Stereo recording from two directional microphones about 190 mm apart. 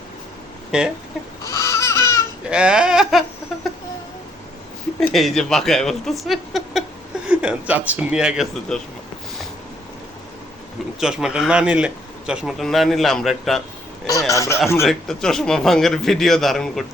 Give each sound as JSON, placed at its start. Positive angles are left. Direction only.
{"t": 0.7, "sound": "a man's voice", "side_deg": -5}
{"t": 1.5, "sound": "baby cry", "side_deg": 15}
{"t": 2.5, "sound": "a sound", "side_deg": -5}
{"t": 4.9, "sound": "a man's voice", "side_deg": 0}
{"t": 11.0, "sound": "a man's voice", "side_deg": -5}
{"t": 14.1, "sound": "speech", "side_deg": 15}
{"t": 14.8, "sound": "a man's voice", "side_deg": 0}